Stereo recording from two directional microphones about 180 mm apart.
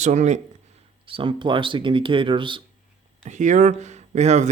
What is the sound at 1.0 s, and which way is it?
Speech, 30° right (ahead or behind).